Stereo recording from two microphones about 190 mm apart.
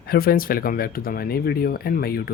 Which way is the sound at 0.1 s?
50° left (ahead or behind).